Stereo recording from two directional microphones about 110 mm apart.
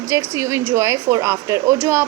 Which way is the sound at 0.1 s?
30° right (ahead or behind).